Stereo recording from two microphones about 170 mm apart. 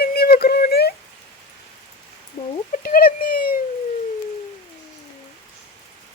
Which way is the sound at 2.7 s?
60° left (ahead or behind).